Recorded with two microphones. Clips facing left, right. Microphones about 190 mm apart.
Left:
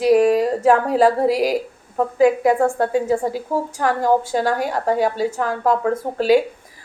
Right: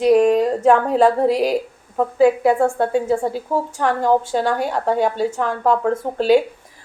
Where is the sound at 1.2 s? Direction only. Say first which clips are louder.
Right 1 dB; 10° left (ahead or behind).